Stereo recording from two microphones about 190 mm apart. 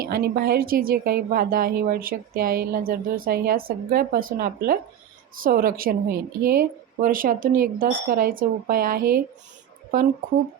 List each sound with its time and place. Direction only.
0.0 s a woman's voice: 50° right (ahead or behind)